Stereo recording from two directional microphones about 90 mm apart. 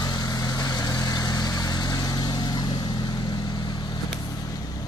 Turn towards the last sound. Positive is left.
turn(degrees=50)  # may be behind; listen again after turning